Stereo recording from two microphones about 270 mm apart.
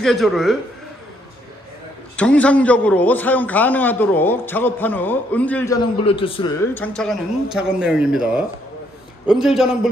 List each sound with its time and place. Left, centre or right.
0.0 s speech: centre
2.1 s a man's voice: centre
6.0 s a man's voice: centre
6.7 s speech: centre